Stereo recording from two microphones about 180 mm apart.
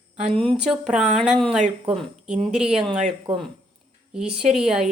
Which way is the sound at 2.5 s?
5° right (ahead or behind).